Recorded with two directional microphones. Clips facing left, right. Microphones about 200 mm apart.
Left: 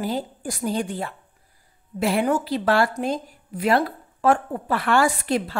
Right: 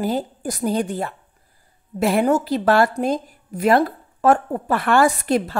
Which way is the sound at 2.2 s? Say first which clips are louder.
Right 4 dB; 45° right (ahead or behind).